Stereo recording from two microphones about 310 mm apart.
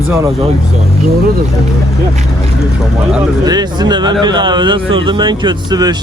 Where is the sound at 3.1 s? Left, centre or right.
Centre.